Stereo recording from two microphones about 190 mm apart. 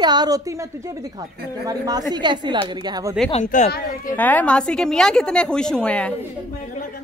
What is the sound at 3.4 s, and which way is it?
Speech, 45° left (ahead or behind).